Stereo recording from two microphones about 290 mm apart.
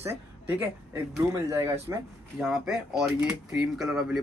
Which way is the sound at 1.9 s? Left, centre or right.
Centre.